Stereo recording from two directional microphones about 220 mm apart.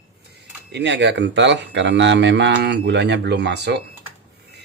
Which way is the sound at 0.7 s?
55° right (ahead or behind).